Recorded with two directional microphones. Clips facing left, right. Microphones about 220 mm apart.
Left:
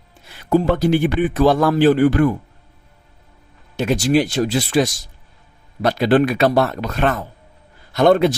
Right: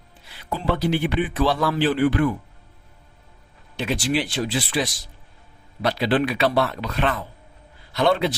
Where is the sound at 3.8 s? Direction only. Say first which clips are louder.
Left 7 dB; 45° left (ahead or behind).